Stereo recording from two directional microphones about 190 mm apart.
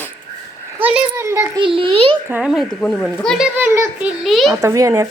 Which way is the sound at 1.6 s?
25° right (ahead or behind).